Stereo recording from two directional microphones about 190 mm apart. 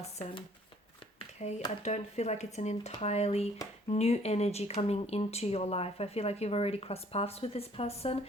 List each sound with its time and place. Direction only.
0.0 s speech: 35° left (ahead or behind)